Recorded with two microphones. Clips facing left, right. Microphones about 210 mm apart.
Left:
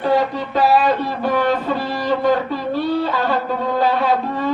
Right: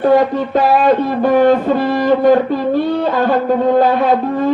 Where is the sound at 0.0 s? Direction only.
50° right (ahead or behind).